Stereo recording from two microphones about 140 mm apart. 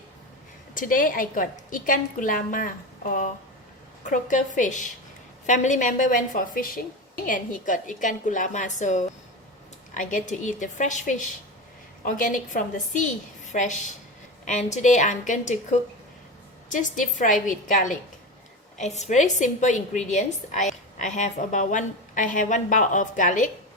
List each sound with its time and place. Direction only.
0.7 s a woman's voice: 75° left (ahead or behind)
4.0 s a woman's voice: 65° left (ahead or behind)
12.0 s a woman's voice: 70° left (ahead or behind)
18.8 s a woman's voice: 55° left (ahead or behind)